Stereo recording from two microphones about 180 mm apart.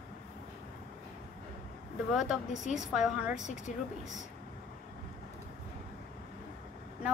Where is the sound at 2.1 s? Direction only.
Centre (ahead or behind).